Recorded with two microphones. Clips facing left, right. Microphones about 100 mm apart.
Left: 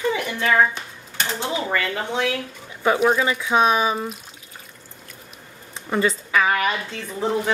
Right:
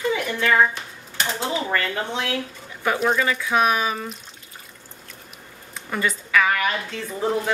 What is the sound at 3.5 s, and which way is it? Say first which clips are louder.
Speech: left 3 dB; 25° left (ahead or behind).